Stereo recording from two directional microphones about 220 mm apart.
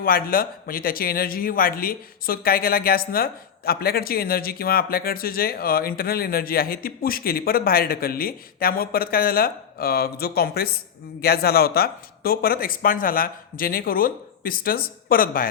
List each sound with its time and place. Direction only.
0.0 s a man's voice: 40° left (ahead or behind)